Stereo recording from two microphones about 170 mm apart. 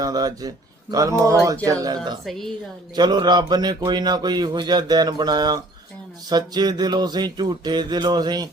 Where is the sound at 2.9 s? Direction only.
25° right (ahead or behind).